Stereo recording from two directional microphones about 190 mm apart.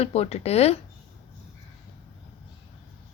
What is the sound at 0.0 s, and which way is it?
Speech, 35° left (ahead or behind).